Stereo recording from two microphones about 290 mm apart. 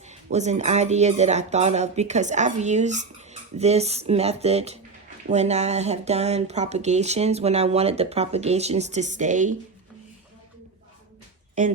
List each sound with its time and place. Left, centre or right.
0.1 s speech: right